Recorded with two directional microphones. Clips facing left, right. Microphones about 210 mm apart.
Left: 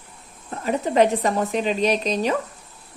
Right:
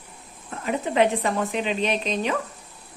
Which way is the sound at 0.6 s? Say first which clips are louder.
Left 3 dB; 40° left (ahead or behind).